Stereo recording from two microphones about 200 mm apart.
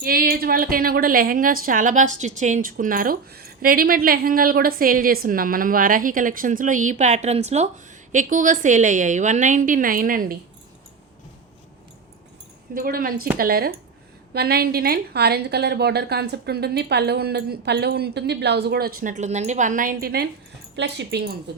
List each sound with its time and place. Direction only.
0.0 s a woman's voice: 45° right (ahead or behind)
12.7 s a woman's voice: 45° right (ahead or behind)
20.7 s speech: 60° right (ahead or behind)